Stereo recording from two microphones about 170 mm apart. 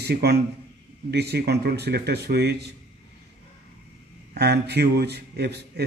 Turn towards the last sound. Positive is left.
turn(degrees=-75)  # may be behind; listen again after turning